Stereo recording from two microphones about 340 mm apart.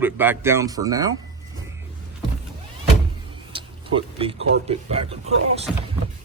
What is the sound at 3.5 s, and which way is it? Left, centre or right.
Speech, centre.